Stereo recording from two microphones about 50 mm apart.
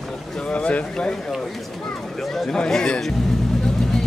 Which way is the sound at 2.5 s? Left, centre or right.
Centre.